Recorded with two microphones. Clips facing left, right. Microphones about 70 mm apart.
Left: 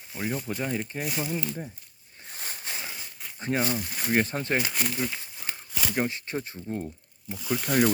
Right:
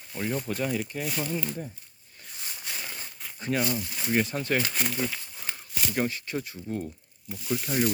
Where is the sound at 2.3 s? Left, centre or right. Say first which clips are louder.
Left 3 dB; left.